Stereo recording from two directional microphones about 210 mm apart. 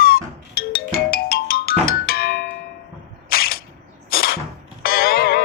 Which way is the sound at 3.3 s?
45° left (ahead or behind).